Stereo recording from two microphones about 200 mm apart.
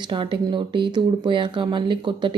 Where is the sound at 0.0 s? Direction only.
25° right (ahead or behind).